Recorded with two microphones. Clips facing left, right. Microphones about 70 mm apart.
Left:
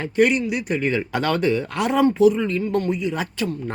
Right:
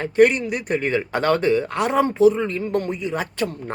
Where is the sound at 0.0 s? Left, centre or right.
Right.